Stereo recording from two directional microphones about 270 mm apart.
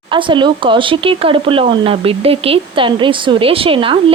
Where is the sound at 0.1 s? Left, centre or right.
Centre.